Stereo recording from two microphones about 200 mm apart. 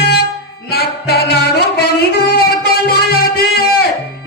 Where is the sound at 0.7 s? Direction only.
50° left (ahead or behind).